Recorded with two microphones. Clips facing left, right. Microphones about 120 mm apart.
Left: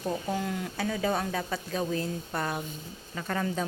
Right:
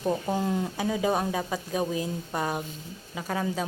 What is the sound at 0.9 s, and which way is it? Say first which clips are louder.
Speech: right 2 dB; 15° right (ahead or behind).